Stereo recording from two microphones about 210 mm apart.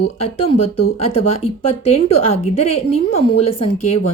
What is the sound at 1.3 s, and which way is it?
Speech, 30° left (ahead or behind).